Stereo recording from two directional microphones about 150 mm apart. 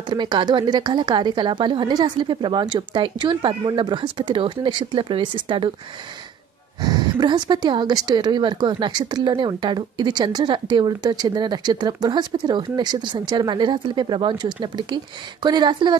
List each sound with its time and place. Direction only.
0.1 s a woman's voice: 30° right (ahead or behind)
6.8 s speech: 25° right (ahead or behind)